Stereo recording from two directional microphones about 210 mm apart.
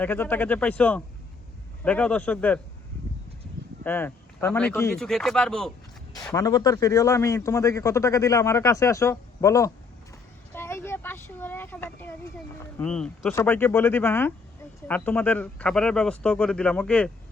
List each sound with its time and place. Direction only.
0.0 s a man's voice: 10° left (ahead or behind)
3.8 s speech: 10° left (ahead or behind)
6.3 s a man's voice: 15° left (ahead or behind)
10.5 s a sound: 10° left (ahead or behind)
12.8 s a man's voice: 5° left (ahead or behind)